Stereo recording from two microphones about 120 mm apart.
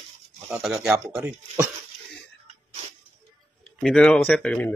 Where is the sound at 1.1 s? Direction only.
15° right (ahead or behind).